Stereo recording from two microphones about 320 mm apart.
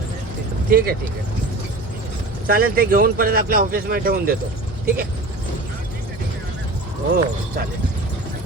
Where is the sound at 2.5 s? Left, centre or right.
Right.